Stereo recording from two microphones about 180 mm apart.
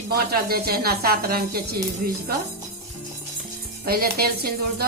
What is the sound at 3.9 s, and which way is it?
Speech, 60° right (ahead or behind).